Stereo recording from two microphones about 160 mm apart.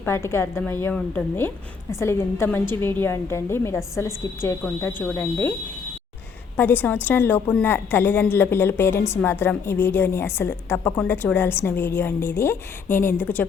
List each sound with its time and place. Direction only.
0.0 s a woman's voice: 15° left (ahead or behind)
6.6 s a woman's voice: 10° left (ahead or behind)